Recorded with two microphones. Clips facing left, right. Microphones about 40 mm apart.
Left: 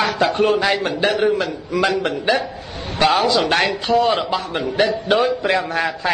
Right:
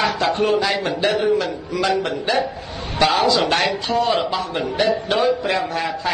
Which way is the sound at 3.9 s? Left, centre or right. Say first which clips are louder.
Left 3 dB; left.